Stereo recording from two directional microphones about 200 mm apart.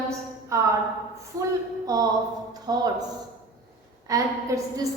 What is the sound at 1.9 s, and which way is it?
Speech, 15° right (ahead or behind).